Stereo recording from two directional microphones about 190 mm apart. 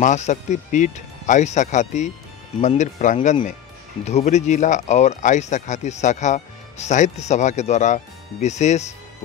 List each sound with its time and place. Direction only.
0.0 s speech: 40° left (ahead or behind)